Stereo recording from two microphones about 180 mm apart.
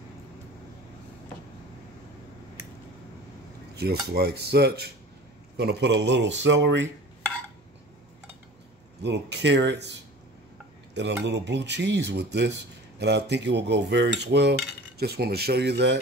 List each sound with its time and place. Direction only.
4.1 s cutlery: 65° right (ahead or behind); by 6.9 s 85° right
9.0 s cutlery: 75° right (ahead or behind)
11.0 s cutlery: 75° right (ahead or behind)